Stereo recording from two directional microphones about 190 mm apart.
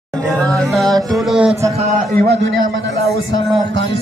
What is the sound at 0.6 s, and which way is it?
Music, centre (ahead or behind).